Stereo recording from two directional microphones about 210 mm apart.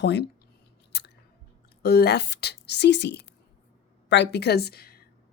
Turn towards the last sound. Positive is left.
turn(degrees=50)  # may be behind; listen again after turning